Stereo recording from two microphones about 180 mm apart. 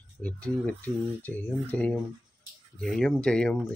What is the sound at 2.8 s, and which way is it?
Mantra, 5° left (ahead or behind).